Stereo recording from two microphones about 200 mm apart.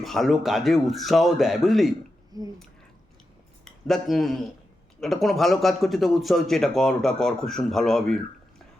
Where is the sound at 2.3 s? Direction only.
20° right (ahead or behind).